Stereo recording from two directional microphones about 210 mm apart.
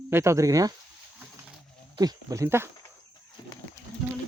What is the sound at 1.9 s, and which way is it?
Speech, 15° right (ahead or behind).